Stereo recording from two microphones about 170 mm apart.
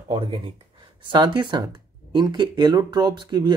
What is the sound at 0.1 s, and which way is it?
Speech, 30° right (ahead or behind).